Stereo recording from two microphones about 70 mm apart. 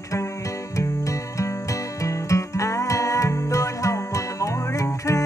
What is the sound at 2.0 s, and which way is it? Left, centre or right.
Music, left.